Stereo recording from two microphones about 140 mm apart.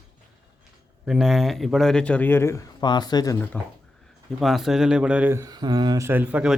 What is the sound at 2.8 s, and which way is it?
Speech, 30° left (ahead or behind).